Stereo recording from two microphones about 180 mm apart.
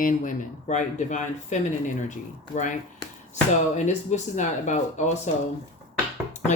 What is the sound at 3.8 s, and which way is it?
Speech, 40° left (ahead or behind).